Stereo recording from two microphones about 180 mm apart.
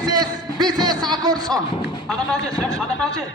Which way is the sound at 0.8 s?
25° right (ahead or behind).